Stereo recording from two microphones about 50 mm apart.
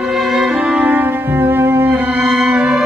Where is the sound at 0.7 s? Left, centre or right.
Right.